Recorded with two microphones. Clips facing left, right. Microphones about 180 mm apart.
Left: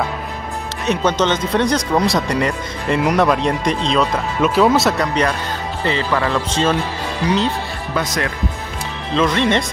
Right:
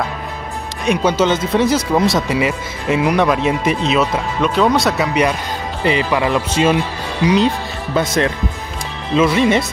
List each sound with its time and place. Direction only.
0.8 s speech: 10° right (ahead or behind)
7.9 s speech: 25° right (ahead or behind)
9.1 s speech: 5° right (ahead or behind)